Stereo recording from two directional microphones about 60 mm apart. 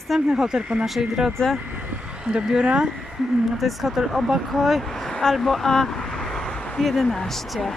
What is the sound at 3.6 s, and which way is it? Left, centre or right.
Speech, centre.